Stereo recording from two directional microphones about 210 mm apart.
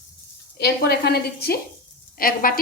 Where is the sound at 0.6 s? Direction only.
50° left (ahead or behind).